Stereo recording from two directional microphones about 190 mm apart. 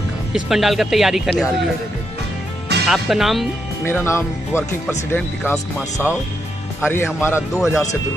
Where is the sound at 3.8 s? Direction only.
10° left (ahead or behind).